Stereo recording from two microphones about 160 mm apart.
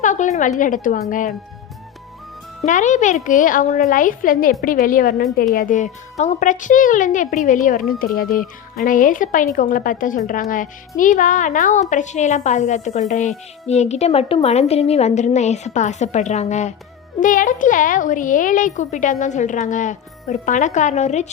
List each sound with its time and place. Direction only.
0.0 s a woman's voice: 50° left (ahead or behind)
2.6 s a woman's voice: 50° left (ahead or behind)